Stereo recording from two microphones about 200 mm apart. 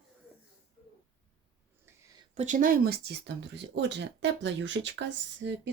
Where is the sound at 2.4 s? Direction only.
40° right (ahead or behind).